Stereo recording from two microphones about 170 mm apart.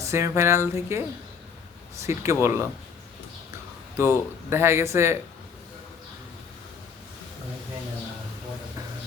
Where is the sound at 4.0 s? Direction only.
15° right (ahead or behind).